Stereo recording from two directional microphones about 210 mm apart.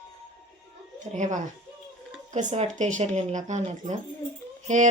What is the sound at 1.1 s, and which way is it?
Speech, 35° right (ahead or behind).